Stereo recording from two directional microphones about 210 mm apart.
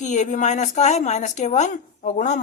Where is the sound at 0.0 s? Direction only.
35° left (ahead or behind).